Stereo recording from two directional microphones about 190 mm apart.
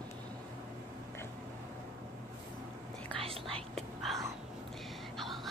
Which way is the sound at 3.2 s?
30° right (ahead or behind).